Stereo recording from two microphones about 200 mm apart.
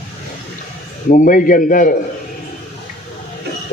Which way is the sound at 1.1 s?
40° left (ahead or behind).